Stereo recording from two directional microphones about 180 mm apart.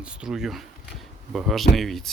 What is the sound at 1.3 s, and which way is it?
Speech, centre (ahead or behind).